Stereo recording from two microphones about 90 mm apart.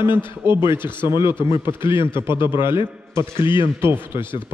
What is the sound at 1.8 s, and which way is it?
Speech, 65° left (ahead or behind).